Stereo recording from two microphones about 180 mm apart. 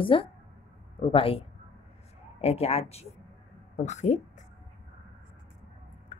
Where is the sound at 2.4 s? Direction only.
35° left (ahead or behind).